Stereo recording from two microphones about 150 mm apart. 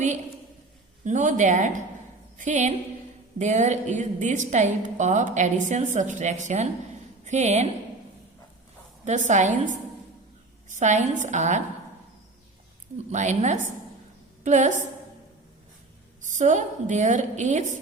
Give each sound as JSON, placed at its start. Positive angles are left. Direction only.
{"t": 1.0, "sound": "a woman's voice", "side_deg": -55}
{"t": 9.0, "sound": "a woman's voice", "side_deg": -55}
{"t": 13.1, "sound": "a woman's voice", "side_deg": -50}
{"t": 16.2, "sound": "a woman's voice", "side_deg": -55}